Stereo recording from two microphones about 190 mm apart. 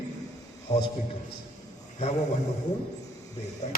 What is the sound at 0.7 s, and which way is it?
Speech, 20° left (ahead or behind).